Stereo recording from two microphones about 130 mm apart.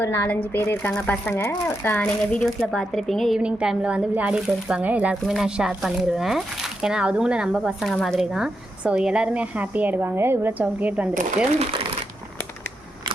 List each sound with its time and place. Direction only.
0.0 s a woman's voice: 20° left (ahead or behind); by 11.1 s 10° right (ahead or behind)